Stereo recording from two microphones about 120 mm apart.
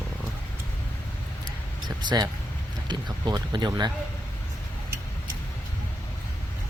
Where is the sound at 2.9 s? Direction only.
35° right (ahead or behind).